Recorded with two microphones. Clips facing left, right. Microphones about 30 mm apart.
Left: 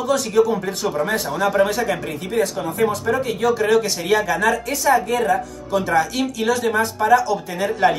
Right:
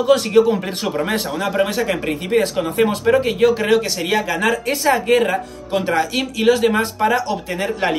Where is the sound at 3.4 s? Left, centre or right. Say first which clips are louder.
Even; right.